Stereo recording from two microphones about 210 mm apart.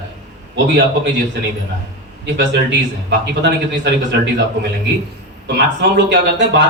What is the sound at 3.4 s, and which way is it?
Speech, 55° right (ahead or behind).